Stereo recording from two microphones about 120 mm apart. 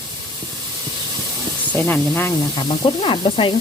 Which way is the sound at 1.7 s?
15° left (ahead or behind).